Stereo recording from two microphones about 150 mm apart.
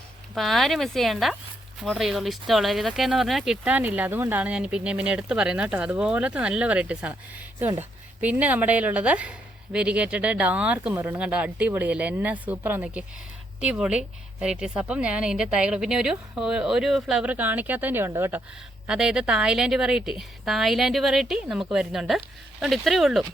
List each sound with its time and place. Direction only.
0.3 s a woman's voice: centre (ahead or behind)